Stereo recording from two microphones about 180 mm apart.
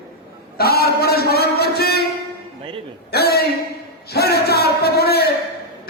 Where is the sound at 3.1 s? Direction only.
60° left (ahead or behind).